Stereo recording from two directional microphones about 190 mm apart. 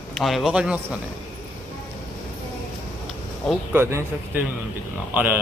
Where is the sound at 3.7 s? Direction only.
10° right (ahead or behind).